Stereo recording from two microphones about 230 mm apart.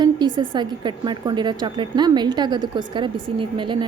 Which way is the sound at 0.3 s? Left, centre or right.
Centre.